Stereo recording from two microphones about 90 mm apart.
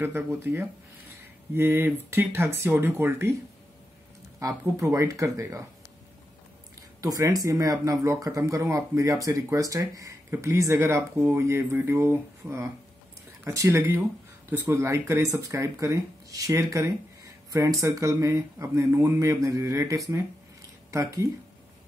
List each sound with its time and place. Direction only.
0.0 s speech: 25° right (ahead or behind)
4.4 s speech: 35° right (ahead or behind)
7.0 s speech: 40° right (ahead or behind)